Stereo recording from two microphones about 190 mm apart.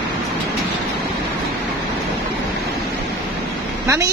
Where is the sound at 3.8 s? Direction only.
15° right (ahead or behind).